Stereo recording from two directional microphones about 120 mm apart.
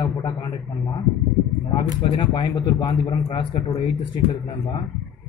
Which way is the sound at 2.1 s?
40° left (ahead or behind).